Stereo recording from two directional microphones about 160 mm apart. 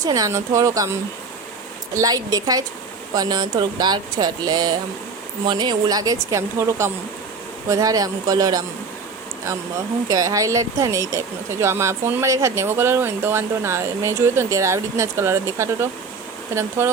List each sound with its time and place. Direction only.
0.0 s speech: 20° right (ahead or behind)
2.0 s speech: 20° right (ahead or behind)
10.1 s speech: 20° right (ahead or behind)